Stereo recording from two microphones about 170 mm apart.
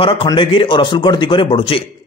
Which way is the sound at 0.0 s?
30° left (ahead or behind).